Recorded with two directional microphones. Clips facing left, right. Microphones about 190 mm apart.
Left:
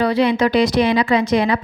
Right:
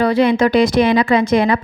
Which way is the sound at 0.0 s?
50° right (ahead or behind).